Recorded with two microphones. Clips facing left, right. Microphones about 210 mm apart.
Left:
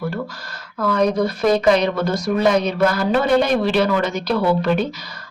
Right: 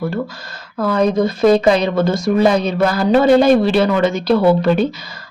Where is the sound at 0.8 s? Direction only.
30° right (ahead or behind).